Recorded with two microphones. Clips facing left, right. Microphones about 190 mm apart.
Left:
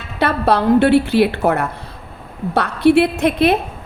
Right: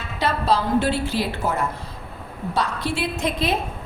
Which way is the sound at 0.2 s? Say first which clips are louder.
Left 5 dB; 60° left (ahead or behind).